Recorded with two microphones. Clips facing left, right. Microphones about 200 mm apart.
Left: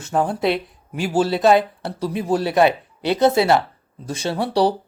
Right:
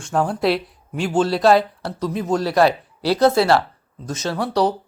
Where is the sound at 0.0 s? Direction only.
5° left (ahead or behind).